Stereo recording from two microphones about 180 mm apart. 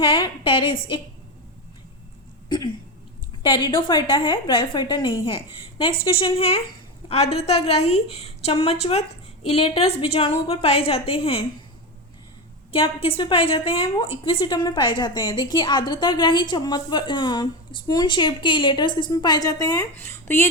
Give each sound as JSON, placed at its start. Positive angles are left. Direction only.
{"t": 0.0, "sound": "a woman's voice", "side_deg": 30}
{"t": 3.4, "sound": "a woman's voice", "side_deg": 25}
{"t": 12.7, "sound": "a woman's voice", "side_deg": 30}